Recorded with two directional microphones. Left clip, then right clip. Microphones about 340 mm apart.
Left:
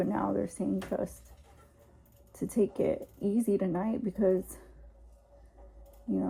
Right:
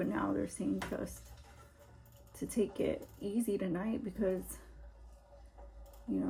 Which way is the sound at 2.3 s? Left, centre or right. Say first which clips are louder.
Left 6 dB; centre.